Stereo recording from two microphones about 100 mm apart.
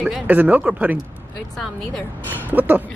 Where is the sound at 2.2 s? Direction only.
20° right (ahead or behind).